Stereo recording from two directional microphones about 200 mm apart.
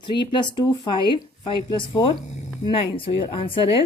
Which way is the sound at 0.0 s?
25° left (ahead or behind).